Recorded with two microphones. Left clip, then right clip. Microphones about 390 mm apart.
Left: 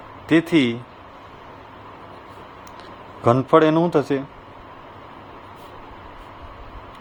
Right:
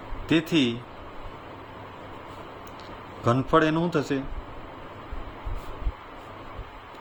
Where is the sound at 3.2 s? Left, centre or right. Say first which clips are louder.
Left 7 dB; centre.